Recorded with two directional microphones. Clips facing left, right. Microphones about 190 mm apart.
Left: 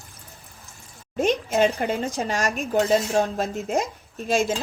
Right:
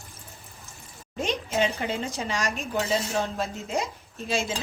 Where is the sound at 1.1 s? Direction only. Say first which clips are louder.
Left 6 dB; 45° left (ahead or behind).